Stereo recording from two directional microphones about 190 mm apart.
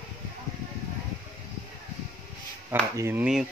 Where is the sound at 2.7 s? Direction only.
10° right (ahead or behind).